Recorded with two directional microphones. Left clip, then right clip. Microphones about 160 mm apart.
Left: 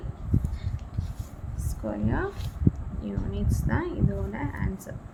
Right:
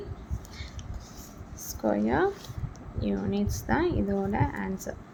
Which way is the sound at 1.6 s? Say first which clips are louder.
Right 5 dB; 45° right (ahead or behind).